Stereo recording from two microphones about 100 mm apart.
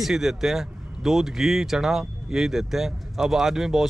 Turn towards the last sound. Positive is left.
turn(degrees=-5)  # may be behind; listen again after turning